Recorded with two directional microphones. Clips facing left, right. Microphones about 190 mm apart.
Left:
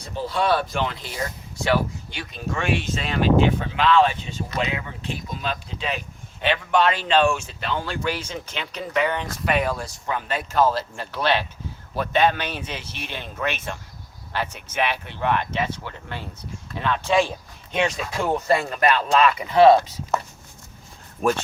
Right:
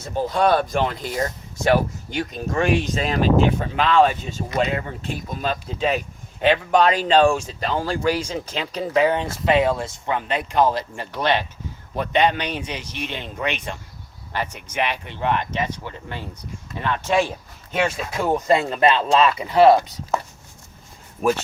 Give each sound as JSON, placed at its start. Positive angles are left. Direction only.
{"t": 0.2, "sound": "speech", "side_deg": -45}
{"t": 19.5, "sound": "speech", "side_deg": -10}
{"t": 21.2, "sound": "speech", "side_deg": -5}